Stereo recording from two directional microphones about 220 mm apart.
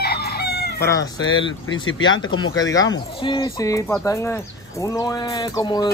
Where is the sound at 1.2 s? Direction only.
60° left (ahead or behind).